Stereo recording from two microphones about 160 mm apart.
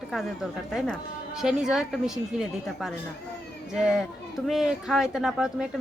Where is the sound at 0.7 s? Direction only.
5° right (ahead or behind).